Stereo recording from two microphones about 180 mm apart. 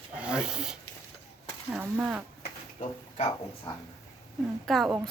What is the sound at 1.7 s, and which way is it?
Speech, 10° right (ahead or behind).